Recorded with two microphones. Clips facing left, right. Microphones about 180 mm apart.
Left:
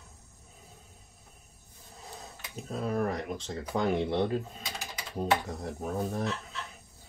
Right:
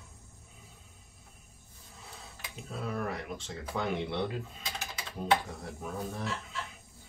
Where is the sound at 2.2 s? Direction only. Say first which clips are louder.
Left 2 dB; 40° left (ahead or behind).